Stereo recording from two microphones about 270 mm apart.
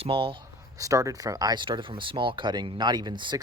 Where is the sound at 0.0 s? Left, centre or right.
Centre.